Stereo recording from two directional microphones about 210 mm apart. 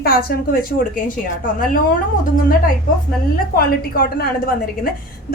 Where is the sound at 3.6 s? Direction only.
45° left (ahead or behind).